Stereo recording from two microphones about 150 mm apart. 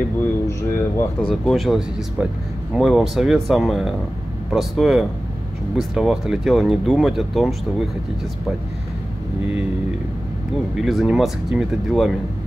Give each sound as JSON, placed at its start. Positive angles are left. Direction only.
{"t": 0.5, "sound": "a sound", "side_deg": 20}
{"t": 1.2, "sound": "speech", "side_deg": 0}
{"t": 10.8, "sound": "speech", "side_deg": 0}